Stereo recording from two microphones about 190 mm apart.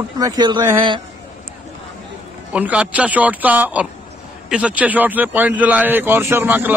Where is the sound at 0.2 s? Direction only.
25° right (ahead or behind).